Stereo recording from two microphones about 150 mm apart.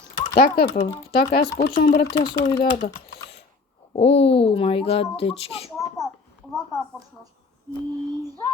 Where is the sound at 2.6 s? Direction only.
70° left (ahead or behind).